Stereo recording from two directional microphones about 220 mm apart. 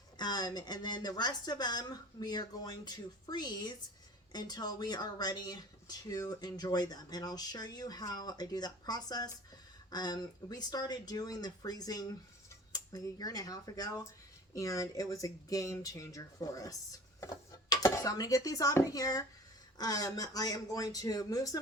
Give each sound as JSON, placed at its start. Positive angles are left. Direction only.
{"t": 0.2, "sound": "a woman's voice", "side_deg": 20}